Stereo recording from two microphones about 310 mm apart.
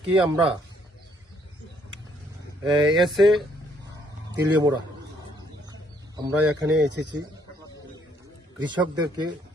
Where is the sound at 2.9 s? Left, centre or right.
Centre.